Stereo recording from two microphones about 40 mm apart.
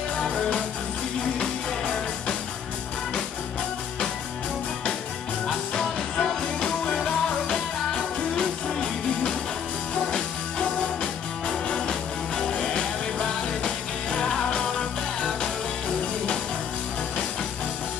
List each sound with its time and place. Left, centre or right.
5.5 s music: centre
11.9 s music: centre